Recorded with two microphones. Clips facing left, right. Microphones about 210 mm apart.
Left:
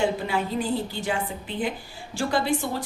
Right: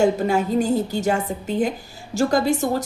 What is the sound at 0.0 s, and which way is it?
Speech, 45° right (ahead or behind).